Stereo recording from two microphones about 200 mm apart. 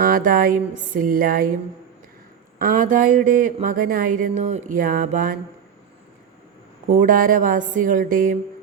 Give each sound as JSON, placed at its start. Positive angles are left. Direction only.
{"t": 0.0, "sound": "speech", "side_deg": -45}
{"t": 2.6, "sound": "speech", "side_deg": -45}
{"t": 6.9, "sound": "speech", "side_deg": -40}